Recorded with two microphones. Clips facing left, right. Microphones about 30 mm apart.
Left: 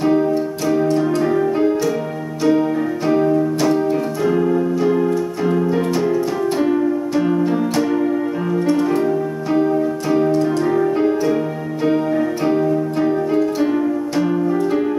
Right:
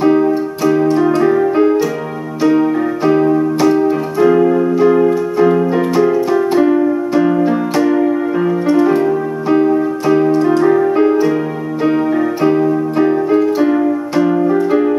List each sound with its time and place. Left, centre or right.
0.0 s music: centre
3.8 s keyboard: centre
8.6 s music: centre
9.0 s keyboard: centre
11.8 s music: centre
14.4 s music: right